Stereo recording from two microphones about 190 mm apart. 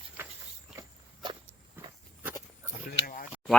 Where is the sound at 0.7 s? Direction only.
25° right (ahead or behind).